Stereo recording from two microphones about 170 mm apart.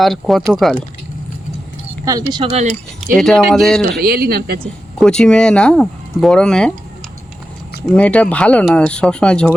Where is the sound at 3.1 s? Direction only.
Centre (ahead or behind).